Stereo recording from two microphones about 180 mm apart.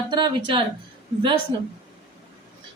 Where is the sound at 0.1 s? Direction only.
25° right (ahead or behind).